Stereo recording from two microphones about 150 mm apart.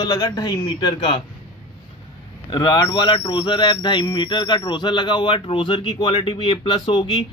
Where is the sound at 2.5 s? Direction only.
30° left (ahead or behind).